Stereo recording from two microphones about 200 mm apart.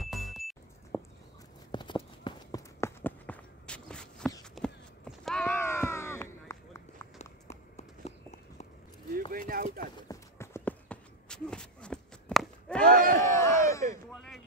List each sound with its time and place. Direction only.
0.0 s music: centre (ahead or behind)
1.7 s clip-clop: 20° left (ahead or behind)
2.2 s walk: 15° left (ahead or behind)
4.6 s a sound: centre (ahead or behind)
7.2 s run: 35° left (ahead or behind)
9.3 s clip-clop: 45° right (ahead or behind)
9.9 s a sound: 15° left (ahead or behind)
12.8 s battle cry: 45° right (ahead or behind)
13.2 s crowd: 15° left (ahead or behind)
14.1 s a sound: centre (ahead or behind)